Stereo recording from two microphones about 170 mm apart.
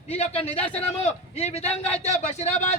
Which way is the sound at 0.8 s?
40° left (ahead or behind).